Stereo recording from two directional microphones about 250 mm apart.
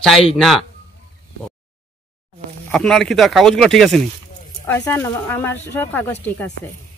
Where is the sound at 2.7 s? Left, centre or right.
Centre.